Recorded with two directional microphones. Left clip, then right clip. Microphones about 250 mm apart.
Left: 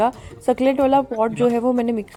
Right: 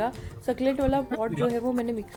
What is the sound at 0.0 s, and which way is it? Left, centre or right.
A woman's voice, left.